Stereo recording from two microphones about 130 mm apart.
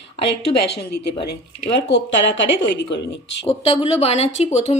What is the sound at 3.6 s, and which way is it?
Speech, 50° left (ahead or behind).